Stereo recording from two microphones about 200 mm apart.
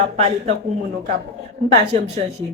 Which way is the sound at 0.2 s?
35° right (ahead or behind).